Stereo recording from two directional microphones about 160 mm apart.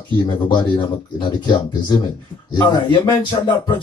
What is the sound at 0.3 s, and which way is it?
Speech, 25° left (ahead or behind).